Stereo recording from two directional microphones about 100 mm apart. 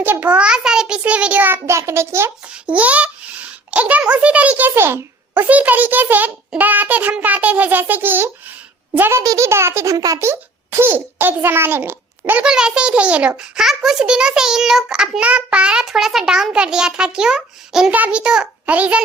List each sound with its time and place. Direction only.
0.0 s a child's voice: 20° right (ahead or behind)
2.6 s a child's voice: 15° right (ahead or behind)
12.5 s a child's voice: 10° right (ahead or behind)